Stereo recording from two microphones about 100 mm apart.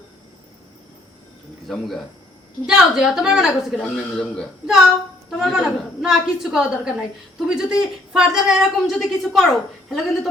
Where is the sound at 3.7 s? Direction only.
5° left (ahead or behind).